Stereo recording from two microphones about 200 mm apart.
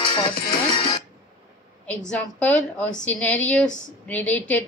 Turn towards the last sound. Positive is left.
turn(degrees=10)  # may be behind; listen again after turning